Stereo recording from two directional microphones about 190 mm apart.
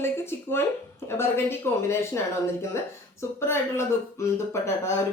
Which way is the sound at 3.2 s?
15° left (ahead or behind).